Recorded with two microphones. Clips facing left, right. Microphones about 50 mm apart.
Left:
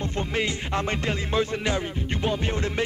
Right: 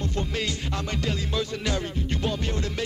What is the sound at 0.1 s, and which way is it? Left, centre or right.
Music, left.